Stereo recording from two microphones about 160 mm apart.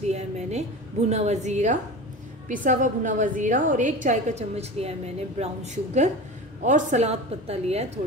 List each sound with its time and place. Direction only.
0.1 s a woman's voice: 45° right (ahead or behind)